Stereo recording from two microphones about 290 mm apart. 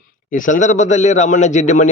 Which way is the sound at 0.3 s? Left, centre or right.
Left.